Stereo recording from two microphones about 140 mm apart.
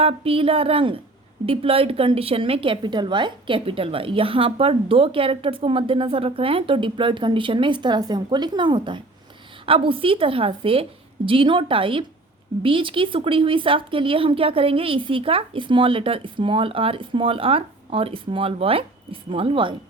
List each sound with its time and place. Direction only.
0.0 s a woman's voice: 40° right (ahead or behind)